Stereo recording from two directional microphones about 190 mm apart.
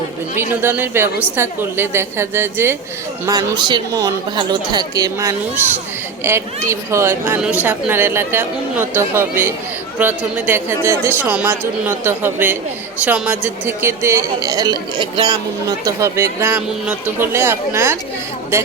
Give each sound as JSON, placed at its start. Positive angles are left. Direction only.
{"t": 0.6, "sound": "a woman's voice", "side_deg": -10}